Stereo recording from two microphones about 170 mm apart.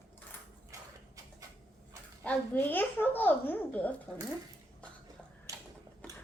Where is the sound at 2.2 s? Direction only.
10° left (ahead or behind).